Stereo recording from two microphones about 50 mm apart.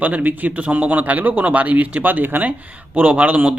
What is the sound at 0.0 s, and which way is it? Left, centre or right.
A man's voice, right.